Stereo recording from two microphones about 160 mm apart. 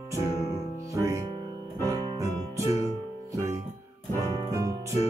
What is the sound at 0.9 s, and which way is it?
Music, 20° right (ahead or behind).